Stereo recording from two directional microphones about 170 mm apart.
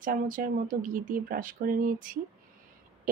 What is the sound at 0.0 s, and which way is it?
Speech, 55° right (ahead or behind).